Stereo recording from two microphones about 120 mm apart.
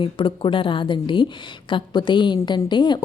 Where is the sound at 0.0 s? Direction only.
45° left (ahead or behind).